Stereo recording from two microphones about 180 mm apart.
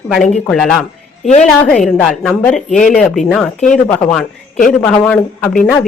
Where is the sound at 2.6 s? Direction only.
45° left (ahead or behind).